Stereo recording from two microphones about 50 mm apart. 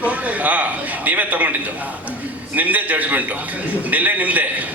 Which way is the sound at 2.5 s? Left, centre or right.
Right.